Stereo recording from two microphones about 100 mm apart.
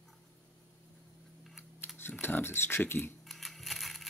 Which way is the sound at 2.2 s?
20° left (ahead or behind).